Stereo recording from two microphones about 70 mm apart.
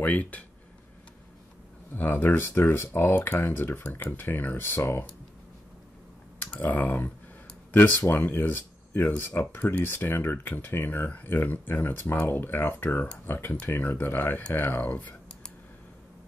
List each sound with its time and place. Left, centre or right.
0.0 s speech: left
2.0 s speech: left
6.6 s speech: left